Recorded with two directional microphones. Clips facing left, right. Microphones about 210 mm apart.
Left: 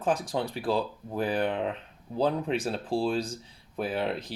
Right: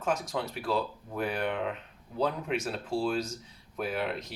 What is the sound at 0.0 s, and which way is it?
Speech, 30° left (ahead or behind).